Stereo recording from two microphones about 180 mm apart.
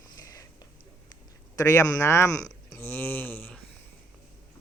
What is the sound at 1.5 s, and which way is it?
Speech, 15° left (ahead or behind).